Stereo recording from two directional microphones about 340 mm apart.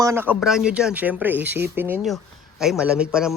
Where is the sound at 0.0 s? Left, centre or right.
Centre.